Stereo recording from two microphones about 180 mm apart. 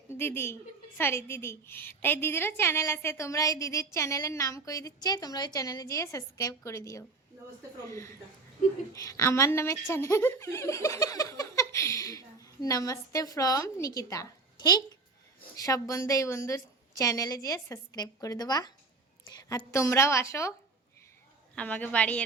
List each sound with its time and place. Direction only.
0.1 s a woman's voice: 15° left (ahead or behind)
8.9 s a woman's voice: 20° left (ahead or behind)
21.5 s a woman's voice: 5° left (ahead or behind)